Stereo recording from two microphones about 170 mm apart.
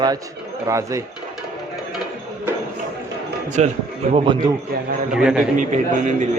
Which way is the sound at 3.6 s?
45° right (ahead or behind).